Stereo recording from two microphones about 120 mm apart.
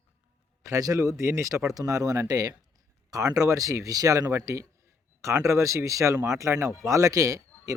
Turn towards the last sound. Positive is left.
turn(degrees=-30)  # may be behind; listen again after turning